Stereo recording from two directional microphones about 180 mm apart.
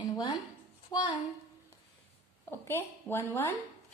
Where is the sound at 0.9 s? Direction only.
20° left (ahead or behind).